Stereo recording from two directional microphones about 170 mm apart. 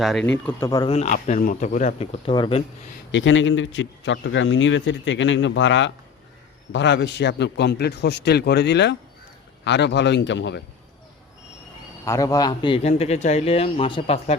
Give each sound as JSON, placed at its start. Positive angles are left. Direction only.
{"t": 0.0, "sound": "speech", "side_deg": 0}
{"t": 0.4, "sound": "a man's voice", "side_deg": 20}
{"t": 0.9, "sound": "speech", "side_deg": 40}
{"t": 3.1, "sound": "speech", "side_deg": 90}
{"t": 12.0, "sound": "a man's voice", "side_deg": 20}